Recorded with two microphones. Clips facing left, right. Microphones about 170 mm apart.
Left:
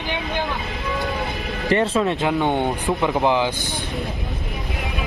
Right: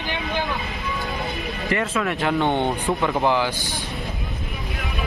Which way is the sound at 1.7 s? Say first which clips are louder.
Left 5 dB; 30° left (ahead or behind).